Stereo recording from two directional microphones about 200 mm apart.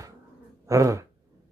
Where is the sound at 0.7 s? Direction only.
15° right (ahead or behind).